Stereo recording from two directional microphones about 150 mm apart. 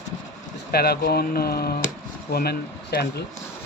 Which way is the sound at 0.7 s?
90° left.